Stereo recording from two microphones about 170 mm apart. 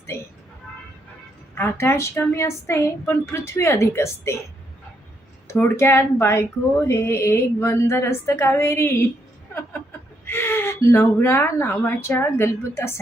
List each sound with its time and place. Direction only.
1.5 s speech: 15° left (ahead or behind)
5.5 s speech: 15° left (ahead or behind)
10.2 s speech: 10° left (ahead or behind)